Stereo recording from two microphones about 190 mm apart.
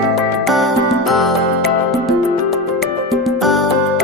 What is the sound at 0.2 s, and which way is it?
Music, centre (ahead or behind).